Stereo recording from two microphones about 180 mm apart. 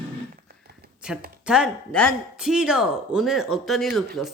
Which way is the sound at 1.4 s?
5° right (ahead or behind).